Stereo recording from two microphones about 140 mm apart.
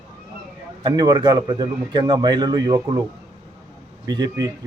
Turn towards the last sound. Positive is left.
turn(degrees=-30)  # may be behind; listen again after turning